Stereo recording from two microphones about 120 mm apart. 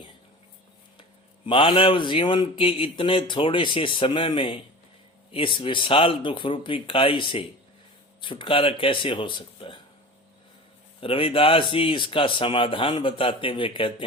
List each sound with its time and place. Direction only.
1.5 s speech: 45° left (ahead or behind)
11.0 s speech: 50° left (ahead or behind)